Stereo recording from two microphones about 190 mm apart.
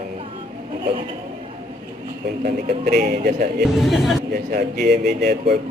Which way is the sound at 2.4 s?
45° right (ahead or behind).